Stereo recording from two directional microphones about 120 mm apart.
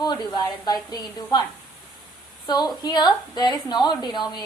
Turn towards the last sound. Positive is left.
turn(degrees=35)  # may be behind; listen again after turning